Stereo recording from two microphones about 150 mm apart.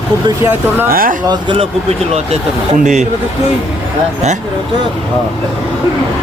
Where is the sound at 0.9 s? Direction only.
70° right (ahead or behind).